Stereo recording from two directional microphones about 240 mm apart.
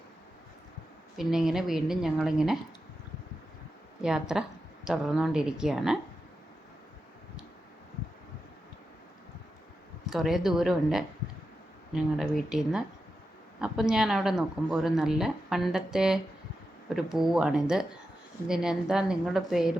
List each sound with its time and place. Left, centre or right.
1.1 s a woman's voice: centre
4.0 s a woman's voice: centre
10.1 s a woman's voice: centre